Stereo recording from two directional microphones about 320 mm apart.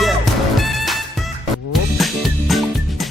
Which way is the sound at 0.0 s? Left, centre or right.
Centre.